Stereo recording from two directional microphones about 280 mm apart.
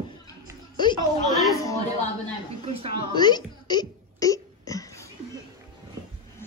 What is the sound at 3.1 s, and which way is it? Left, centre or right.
Hiccup, centre.